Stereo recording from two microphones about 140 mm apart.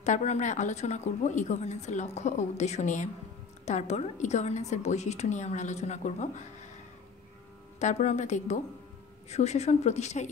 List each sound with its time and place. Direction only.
0.0 s speech: 55° left (ahead or behind)
7.8 s a woman's voice: 55° left (ahead or behind)